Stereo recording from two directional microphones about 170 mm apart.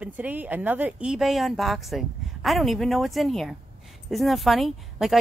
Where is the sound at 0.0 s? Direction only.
10° right (ahead or behind).